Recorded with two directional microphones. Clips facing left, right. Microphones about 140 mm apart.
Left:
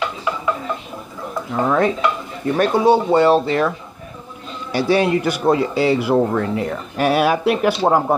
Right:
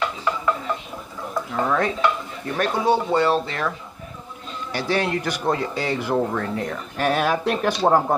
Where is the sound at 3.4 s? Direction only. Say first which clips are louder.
Left 8 dB; 15° left (ahead or behind).